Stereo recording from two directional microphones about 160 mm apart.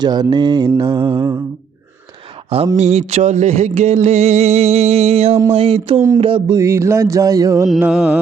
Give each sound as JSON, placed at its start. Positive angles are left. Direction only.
{"t": 0.0, "sound": "mantra", "side_deg": -25}
{"t": 2.7, "sound": "music", "side_deg": -40}
{"t": 6.6, "sound": "mantra", "side_deg": -15}
{"t": 7.8, "sound": "music", "side_deg": -5}